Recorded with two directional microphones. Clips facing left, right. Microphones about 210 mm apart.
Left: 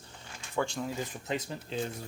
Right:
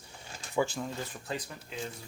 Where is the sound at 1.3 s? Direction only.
25° left (ahead or behind).